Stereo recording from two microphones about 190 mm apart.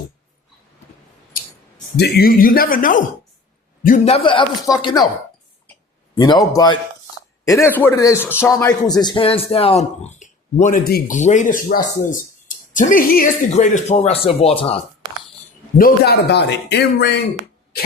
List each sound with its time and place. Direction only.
2.0 s speech: 55° left (ahead or behind); by 5.0 s 20° left (ahead or behind)
6.1 s speech: 20° left (ahead or behind); by 11.2 s 50° left (ahead or behind)
11.2 s speech: 40° left (ahead or behind)
15.8 s speech: 60° left (ahead or behind)